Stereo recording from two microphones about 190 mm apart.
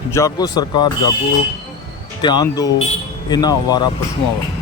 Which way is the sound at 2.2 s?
20° left (ahead or behind).